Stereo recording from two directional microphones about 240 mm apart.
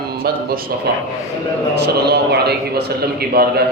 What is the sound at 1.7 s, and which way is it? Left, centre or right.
Speech, right.